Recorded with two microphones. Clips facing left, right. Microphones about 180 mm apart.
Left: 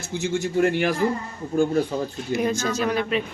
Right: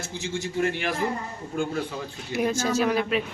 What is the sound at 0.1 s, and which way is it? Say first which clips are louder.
A man's voice: left 8 dB; 50° left (ahead or behind).